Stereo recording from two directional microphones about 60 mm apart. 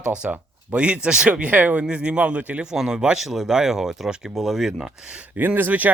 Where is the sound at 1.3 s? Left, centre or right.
Right.